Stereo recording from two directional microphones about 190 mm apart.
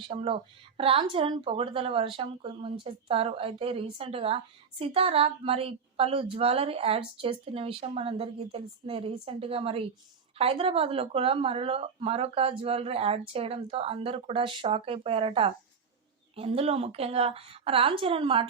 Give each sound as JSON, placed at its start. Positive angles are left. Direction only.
{"t": 0.0, "sound": "a woman's voice", "side_deg": -30}